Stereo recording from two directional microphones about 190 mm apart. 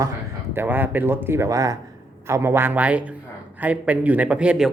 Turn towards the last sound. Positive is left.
turn(degrees=-5)  # may be behind; listen again after turning